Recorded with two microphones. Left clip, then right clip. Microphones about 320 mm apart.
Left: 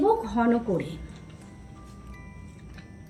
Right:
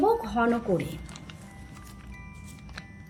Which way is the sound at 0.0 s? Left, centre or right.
Right.